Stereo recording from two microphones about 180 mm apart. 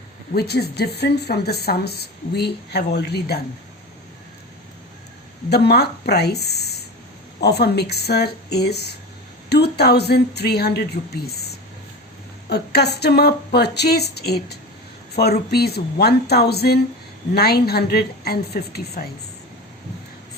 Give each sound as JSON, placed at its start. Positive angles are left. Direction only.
{"t": 0.3, "sound": "speech", "side_deg": 65}
{"t": 5.5, "sound": "speech", "side_deg": 65}